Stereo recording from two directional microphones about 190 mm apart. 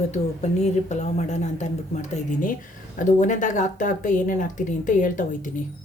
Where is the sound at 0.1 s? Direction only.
35° left (ahead or behind).